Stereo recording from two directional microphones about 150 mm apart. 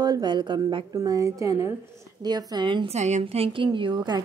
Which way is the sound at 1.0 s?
20° right (ahead or behind).